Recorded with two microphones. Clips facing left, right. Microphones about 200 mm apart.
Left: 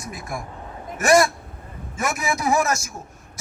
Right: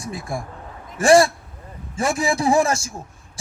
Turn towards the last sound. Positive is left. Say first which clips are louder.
# right 3 dB
turn(degrees=-30)  # may be behind; listen again after turning